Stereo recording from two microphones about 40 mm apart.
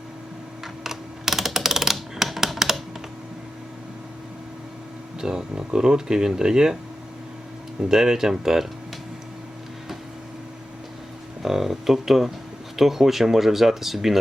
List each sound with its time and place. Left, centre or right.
0.9 s computer keyboard: centre
5.2 s speech: centre
7.8 s speech: centre
11.4 s speech: centre